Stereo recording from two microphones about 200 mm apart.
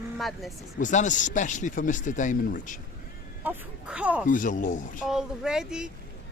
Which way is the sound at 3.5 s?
5° right (ahead or behind).